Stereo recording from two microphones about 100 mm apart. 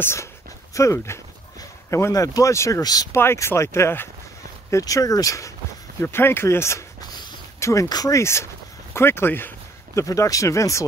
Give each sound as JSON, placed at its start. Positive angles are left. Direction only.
{"t": 0.0, "sound": "speech", "side_deg": 25}
{"t": 3.1, "sound": "speech", "side_deg": 25}
{"t": 9.9, "sound": "speech", "side_deg": 35}